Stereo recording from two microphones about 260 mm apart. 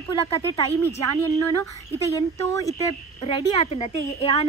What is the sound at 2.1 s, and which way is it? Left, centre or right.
Speech, centre.